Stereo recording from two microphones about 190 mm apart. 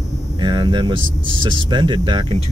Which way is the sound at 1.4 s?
25° right (ahead or behind).